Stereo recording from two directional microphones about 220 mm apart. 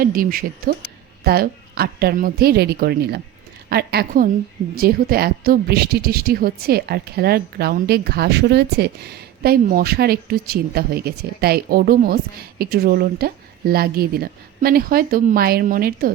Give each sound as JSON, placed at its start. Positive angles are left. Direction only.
{"t": 0.0, "sound": "a woman's voice", "side_deg": -40}